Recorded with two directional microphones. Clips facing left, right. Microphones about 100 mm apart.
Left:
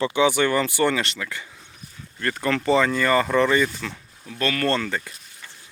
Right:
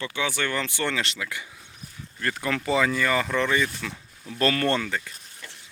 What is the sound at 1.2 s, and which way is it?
Speech, 10° right (ahead or behind).